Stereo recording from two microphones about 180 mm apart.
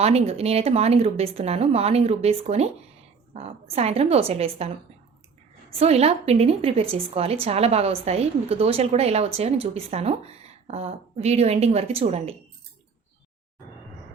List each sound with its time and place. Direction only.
0.0 s a woman's voice: 35° right (ahead or behind)
5.8 s a woman's voice: 35° right (ahead or behind)